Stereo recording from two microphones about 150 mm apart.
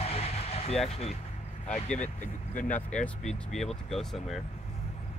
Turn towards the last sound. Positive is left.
turn(degrees=0)  # may be behind; listen again after turning